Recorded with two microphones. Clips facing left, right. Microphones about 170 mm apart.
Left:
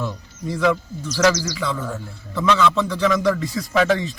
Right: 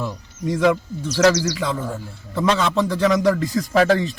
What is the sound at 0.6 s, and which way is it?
Speech, 40° right (ahead or behind).